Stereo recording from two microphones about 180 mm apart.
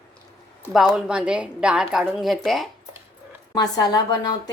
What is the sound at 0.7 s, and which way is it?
A woman's voice, centre (ahead or behind).